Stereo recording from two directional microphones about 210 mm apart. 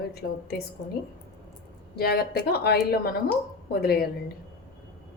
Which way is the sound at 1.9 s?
50° left (ahead or behind).